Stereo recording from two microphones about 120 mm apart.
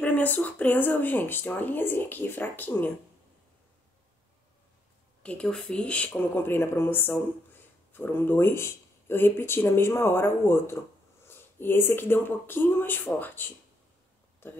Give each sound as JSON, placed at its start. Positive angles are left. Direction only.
{"t": 0.0, "sound": "speech", "side_deg": 15}
{"t": 5.2, "sound": "speech", "side_deg": 10}